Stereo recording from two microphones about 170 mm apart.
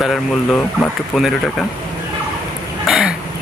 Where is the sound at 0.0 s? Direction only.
Centre (ahead or behind).